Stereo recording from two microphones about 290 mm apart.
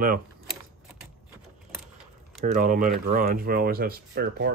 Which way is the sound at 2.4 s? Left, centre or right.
Right.